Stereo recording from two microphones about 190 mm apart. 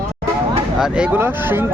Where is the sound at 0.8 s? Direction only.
5° right (ahead or behind).